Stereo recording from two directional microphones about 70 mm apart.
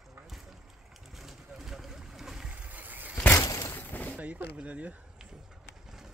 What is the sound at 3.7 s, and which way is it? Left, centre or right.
Fusillade, left.